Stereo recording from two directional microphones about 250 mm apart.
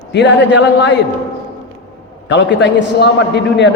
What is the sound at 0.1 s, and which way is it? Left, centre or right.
Speech, left.